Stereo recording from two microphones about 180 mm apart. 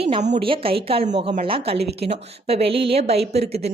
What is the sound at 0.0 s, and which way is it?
A woman's voice, 35° right (ahead or behind).